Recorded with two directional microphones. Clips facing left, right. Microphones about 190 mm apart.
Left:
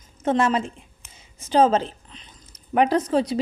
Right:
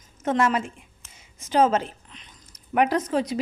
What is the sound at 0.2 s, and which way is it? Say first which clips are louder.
Speech: left 2 dB; 30° left (ahead or behind).